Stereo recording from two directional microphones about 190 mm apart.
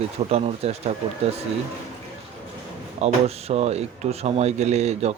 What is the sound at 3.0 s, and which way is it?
Speech, 35° right (ahead or behind).